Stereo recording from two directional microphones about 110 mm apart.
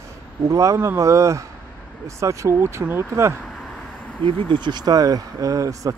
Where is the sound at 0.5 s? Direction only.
30° right (ahead or behind).